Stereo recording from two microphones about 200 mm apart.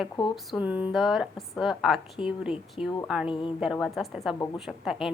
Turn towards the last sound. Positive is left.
turn(degrees=0)  # may be behind; listen again after turning